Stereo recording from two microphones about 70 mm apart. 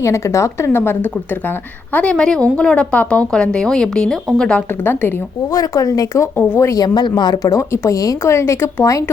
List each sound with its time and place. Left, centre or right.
0.0 s speech: left
2.1 s a woman's voice: centre
4.8 s speech: left
5.5 s speech: left
6.7 s speech: left
7.9 s speech: left